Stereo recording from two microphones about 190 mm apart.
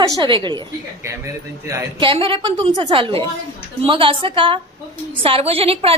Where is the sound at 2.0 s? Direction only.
25° right (ahead or behind).